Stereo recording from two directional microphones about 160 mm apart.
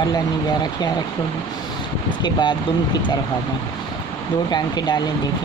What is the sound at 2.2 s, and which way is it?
Speech, 30° left (ahead or behind).